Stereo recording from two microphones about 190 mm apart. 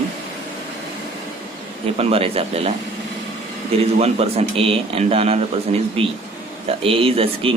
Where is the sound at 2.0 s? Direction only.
30° right (ahead or behind).